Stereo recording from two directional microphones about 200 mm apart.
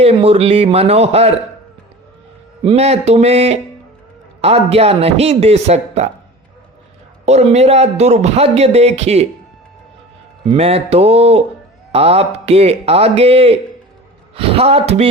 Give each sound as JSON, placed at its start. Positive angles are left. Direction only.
{"t": 0.0, "sound": "speech", "side_deg": -30}
{"t": 2.6, "sound": "a man's voice", "side_deg": -30}
{"t": 7.3, "sound": "a man's voice", "side_deg": -30}
{"t": 10.5, "sound": "a man's voice", "side_deg": -30}